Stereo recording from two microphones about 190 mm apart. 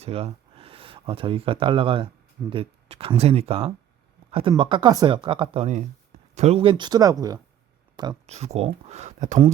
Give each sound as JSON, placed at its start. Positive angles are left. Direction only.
{"t": 0.0, "sound": "speech", "side_deg": -30}
{"t": 8.3, "sound": "speech", "side_deg": -35}